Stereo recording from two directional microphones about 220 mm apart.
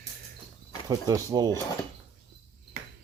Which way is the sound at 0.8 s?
15° right (ahead or behind).